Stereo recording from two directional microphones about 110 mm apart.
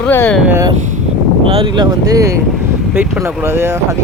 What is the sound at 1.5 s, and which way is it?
Speech, 60° right (ahead or behind).